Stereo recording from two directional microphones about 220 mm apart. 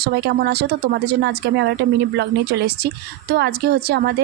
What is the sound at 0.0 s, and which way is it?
Speech, 45° right (ahead or behind).